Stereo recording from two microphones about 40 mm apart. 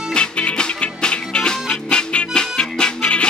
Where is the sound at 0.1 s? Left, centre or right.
Left.